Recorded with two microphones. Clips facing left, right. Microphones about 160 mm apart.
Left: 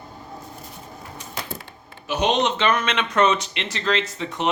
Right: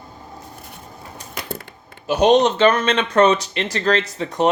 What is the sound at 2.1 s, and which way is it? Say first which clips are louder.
Speech: right 7 dB; 40° right (ahead or behind).